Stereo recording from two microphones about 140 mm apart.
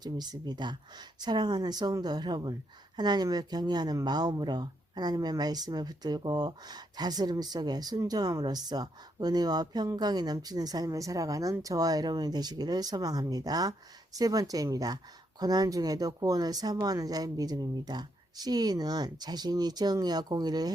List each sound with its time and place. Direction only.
0.0 s a woman's voice: 30° right (ahead or behind)